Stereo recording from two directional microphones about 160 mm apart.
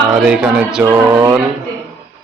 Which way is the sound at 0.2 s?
5° right (ahead or behind).